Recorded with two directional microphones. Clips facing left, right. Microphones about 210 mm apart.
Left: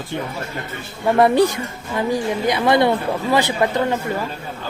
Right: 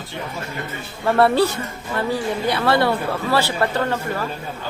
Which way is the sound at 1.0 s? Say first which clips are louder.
Left 2 dB; 15° left (ahead or behind).